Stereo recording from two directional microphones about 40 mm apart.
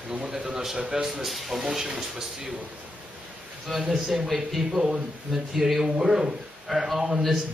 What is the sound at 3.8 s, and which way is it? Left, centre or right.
A man's voice, centre.